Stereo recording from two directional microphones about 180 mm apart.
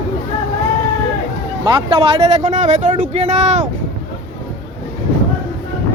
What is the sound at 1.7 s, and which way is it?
Speech, 30° right (ahead or behind).